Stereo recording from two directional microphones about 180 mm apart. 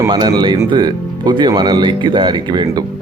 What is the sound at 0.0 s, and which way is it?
Speech, 25° right (ahead or behind).